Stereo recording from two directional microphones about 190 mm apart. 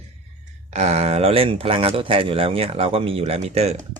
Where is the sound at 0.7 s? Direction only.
35° right (ahead or behind).